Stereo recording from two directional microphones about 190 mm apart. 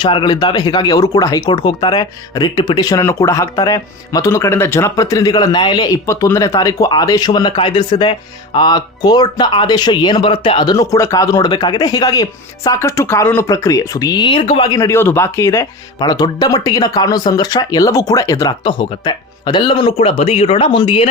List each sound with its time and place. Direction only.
0.0 s speech: 25° left (ahead or behind)